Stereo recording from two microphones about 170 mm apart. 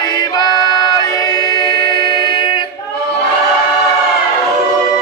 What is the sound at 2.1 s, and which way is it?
Music, 25° left (ahead or behind).